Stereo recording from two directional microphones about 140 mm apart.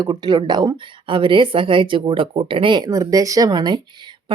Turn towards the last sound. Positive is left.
turn(degrees=-30)  # may be behind; listen again after turning